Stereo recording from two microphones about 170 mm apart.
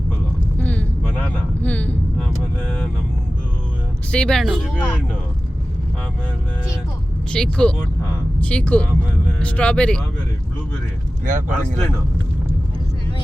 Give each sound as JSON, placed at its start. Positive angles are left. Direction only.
{"t": 0.6, "sound": "vehicle", "side_deg": 10}
{"t": 4.1, "sound": "speech", "side_deg": 5}
{"t": 7.3, "sound": "speech", "side_deg": 5}
{"t": 11.3, "sound": "speech", "side_deg": -45}